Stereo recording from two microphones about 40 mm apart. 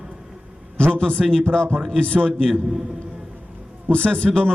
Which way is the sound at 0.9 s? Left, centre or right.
Left.